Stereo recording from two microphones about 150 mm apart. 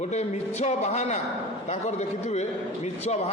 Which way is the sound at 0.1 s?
50° left (ahead or behind).